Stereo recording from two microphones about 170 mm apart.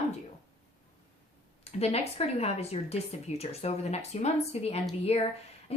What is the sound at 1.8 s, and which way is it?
Speech, 35° left (ahead or behind).